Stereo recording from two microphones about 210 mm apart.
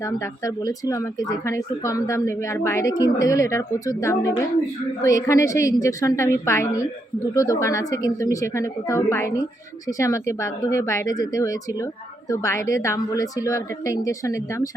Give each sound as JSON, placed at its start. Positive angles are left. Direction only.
{"t": 0.0, "sound": "speech", "side_deg": 15}